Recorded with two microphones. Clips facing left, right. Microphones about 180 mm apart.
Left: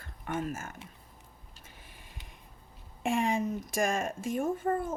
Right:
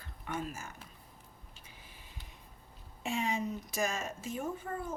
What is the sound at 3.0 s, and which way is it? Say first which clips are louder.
A woman's voice: left 5 dB; 50° left (ahead or behind).